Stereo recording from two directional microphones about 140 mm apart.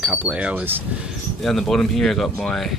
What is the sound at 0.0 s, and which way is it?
Speech, 10° right (ahead or behind).